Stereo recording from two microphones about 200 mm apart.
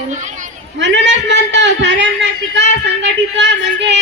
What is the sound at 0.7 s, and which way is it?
A man's voice, 65° right (ahead or behind).